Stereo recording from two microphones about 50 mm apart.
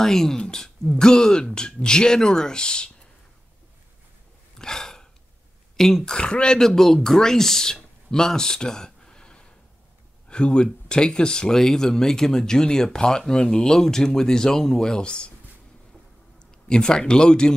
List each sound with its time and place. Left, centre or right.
0.0 s speech: centre
4.6 s a sound: centre
5.8 s speech: centre
16.3 s a man's voice: centre